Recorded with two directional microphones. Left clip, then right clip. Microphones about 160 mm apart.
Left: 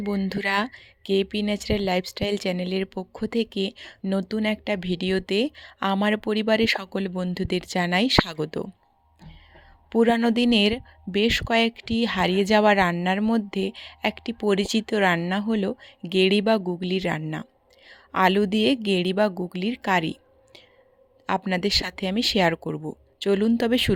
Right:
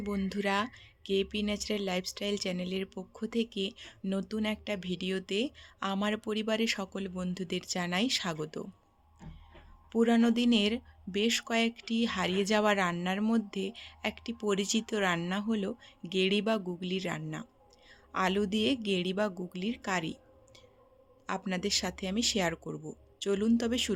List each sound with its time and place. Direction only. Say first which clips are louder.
0.0 s speech: left 7 dB; 45° left (ahead or behind)
9.9 s speech: left 7 dB; 45° left (ahead or behind)